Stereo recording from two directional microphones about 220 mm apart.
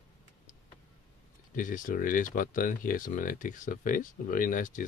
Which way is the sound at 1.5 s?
35° left (ahead or behind).